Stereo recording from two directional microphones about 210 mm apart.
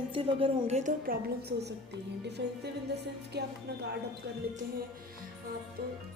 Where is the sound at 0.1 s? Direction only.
25° right (ahead or behind); by 1.7 s 50° right (ahead or behind).